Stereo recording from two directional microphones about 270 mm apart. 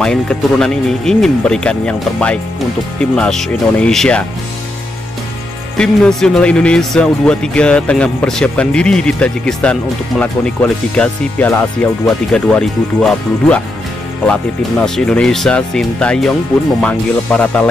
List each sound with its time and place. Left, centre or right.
0.0 s speech: centre
5.8 s speech: centre